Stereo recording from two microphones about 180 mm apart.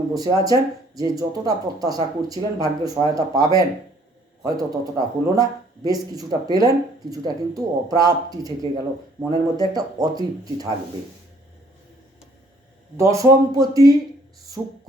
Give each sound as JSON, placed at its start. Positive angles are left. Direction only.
{"t": 0.1, "sound": "speech", "side_deg": -20}
{"t": 13.0, "sound": "speech", "side_deg": -20}
{"t": 14.6, "sound": "a sound", "side_deg": -5}